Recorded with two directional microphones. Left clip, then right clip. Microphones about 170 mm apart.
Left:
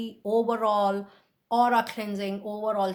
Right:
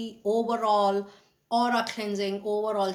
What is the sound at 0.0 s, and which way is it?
Speech, 50° left (ahead or behind).